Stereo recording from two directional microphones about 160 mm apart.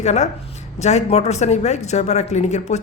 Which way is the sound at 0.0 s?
45° left (ahead or behind).